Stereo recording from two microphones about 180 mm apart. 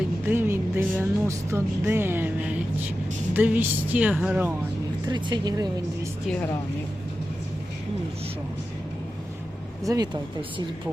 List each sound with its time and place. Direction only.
0.3 s music: 10° right (ahead or behind)
3.3 s speech: 10° right (ahead or behind)
5.0 s speech: 25° right (ahead or behind)
6.2 s speech: 5° left (ahead or behind)
9.8 s speech: 20° right (ahead or behind)